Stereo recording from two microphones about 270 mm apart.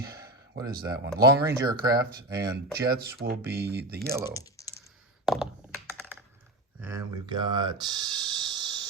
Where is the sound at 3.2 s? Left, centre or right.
Right.